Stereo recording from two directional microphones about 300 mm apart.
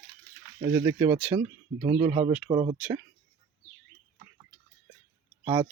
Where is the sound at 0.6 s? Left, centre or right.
Centre.